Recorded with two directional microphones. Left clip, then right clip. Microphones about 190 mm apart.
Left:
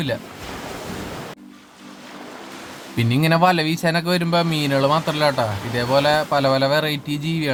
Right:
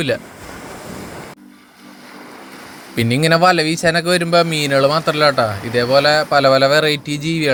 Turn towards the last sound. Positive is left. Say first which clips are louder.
# right 6 dB
turn(degrees=-10)  # may be behind; listen again after turning